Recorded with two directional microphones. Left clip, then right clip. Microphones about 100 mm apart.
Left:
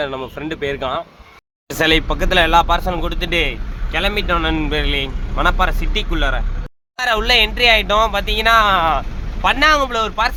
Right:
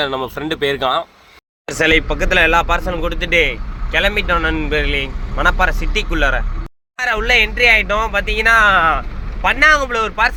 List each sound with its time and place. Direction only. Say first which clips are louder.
0.0 s speech: right 3 dB; 25° right (ahead or behind)
1.7 s speech: right 1 dB; 15° left (ahead or behind)
5.4 s speech: right 2 dB; centre (ahead or behind)
6.9 s speech: even; 25° left (ahead or behind); by 9.0 s 10° left (ahead or behind)
9.0 s speech: left 1 dB; 25° left (ahead or behind)